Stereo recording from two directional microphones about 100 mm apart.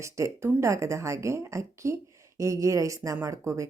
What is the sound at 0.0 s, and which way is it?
A woman's voice, 25° right (ahead or behind).